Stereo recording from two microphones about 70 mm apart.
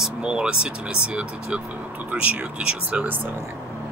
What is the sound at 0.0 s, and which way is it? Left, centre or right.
Speech, centre.